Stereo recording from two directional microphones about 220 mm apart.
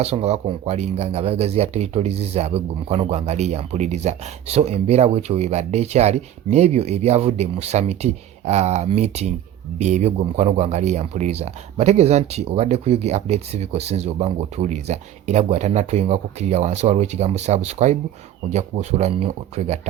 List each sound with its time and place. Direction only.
0.0 s speech: 30° right (ahead or behind)